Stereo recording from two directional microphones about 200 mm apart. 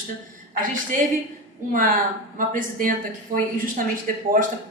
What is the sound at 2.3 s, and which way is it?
A woman's voice, 40° right (ahead or behind).